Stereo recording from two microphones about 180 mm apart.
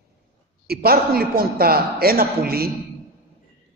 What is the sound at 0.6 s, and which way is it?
A man's voice, 55° right (ahead or behind).